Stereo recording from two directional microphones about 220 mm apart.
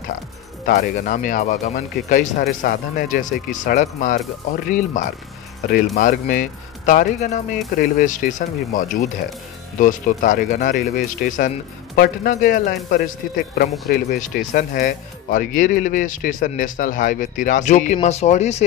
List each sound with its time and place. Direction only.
0.7 s speech: 40° left (ahead or behind)